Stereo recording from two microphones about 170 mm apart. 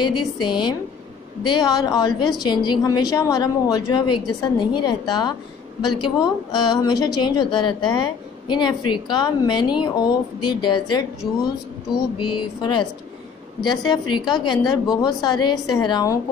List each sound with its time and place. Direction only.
0.0 s a woman's voice: 25° left (ahead or behind)
12.2 s a woman's voice: 25° left (ahead or behind)